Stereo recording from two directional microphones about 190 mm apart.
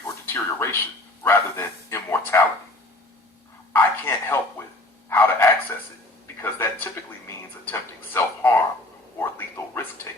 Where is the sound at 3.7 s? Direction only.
10° left (ahead or behind).